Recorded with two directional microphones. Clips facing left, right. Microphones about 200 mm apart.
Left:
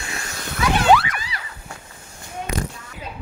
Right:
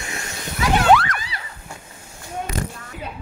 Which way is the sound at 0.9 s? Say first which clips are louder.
Even; centre (ahead or behind).